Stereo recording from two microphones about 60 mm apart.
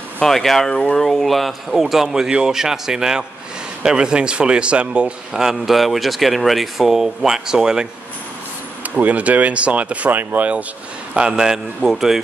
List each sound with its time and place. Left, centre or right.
0.2 s speech: centre
1.0 s a man's voice: centre
8.8 s speech: right
11.1 s a man's voice: centre